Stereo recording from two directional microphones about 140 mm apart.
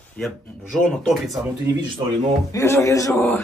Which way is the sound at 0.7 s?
Centre (ahead or behind).